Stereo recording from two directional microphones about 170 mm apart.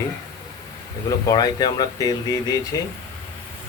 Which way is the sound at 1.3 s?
25° left (ahead or behind).